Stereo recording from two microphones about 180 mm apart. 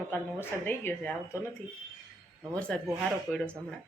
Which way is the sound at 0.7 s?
10° left (ahead or behind).